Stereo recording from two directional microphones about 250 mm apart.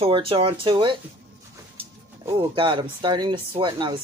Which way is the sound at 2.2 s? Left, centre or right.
Centre.